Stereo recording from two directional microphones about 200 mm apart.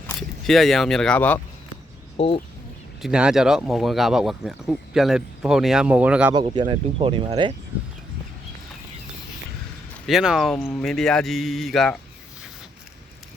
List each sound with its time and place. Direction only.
0.2 s speech: centre (ahead or behind)
2.1 s speech: 30° left (ahead or behind)
3.0 s speech: 5° right (ahead or behind)
6.3 s speech: 25° right (ahead or behind)
10.1 s speech: centre (ahead or behind)